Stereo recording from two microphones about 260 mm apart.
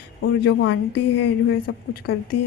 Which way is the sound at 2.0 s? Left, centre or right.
Left.